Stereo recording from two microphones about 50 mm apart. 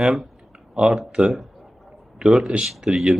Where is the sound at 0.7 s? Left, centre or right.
Centre.